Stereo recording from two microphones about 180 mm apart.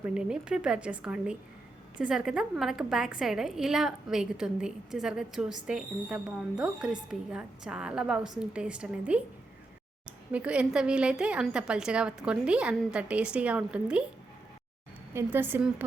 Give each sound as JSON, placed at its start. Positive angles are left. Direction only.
{"t": 0.0, "sound": "a woman's voice", "side_deg": -5}
{"t": 15.1, "sound": "a woman's voice", "side_deg": -10}